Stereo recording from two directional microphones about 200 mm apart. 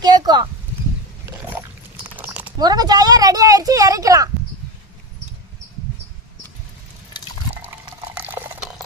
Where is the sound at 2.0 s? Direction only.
10° right (ahead or behind).